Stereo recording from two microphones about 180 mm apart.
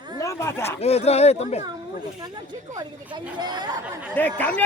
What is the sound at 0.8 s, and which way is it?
Speech, 35° left (ahead or behind).